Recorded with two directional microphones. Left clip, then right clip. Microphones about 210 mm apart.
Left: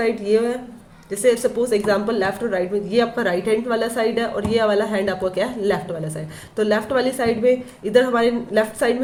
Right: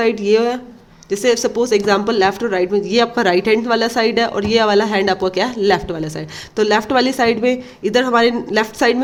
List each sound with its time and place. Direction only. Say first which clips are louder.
0.0 s a woman's voice: right 4 dB; 55° right (ahead or behind)